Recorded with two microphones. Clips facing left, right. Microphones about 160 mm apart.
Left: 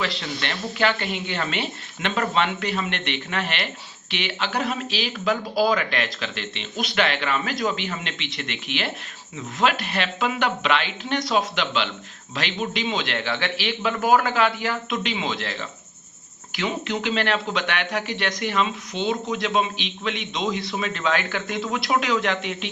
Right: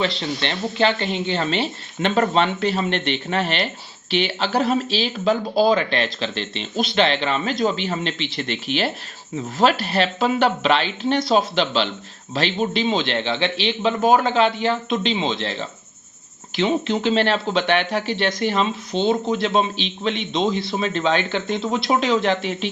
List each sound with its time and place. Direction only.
0.0 s a man's voice: 25° right (ahead or behind)